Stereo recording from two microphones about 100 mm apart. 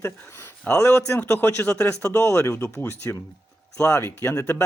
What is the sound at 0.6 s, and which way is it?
Speech, 25° left (ahead or behind).